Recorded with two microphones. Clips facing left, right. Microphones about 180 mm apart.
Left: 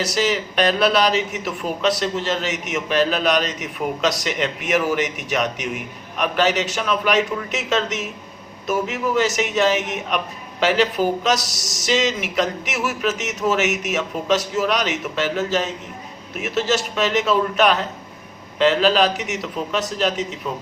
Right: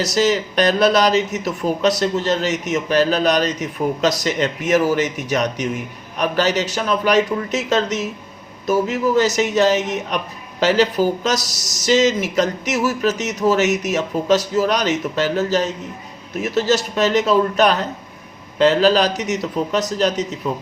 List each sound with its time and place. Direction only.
0.0 s a man's voice: 40° right (ahead or behind)